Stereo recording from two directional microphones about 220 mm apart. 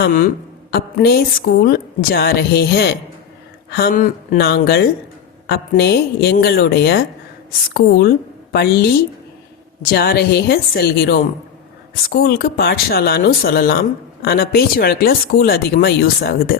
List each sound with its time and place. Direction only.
0.0 s speech: 40° left (ahead or behind)
9.9 s speech: 45° left (ahead or behind)